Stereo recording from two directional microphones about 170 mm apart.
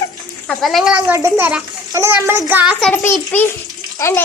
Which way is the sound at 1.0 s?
15° right (ahead or behind).